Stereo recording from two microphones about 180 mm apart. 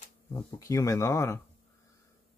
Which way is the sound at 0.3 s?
15° left (ahead or behind).